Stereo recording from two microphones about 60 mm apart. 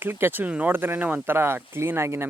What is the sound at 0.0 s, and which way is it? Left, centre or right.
Speech, right.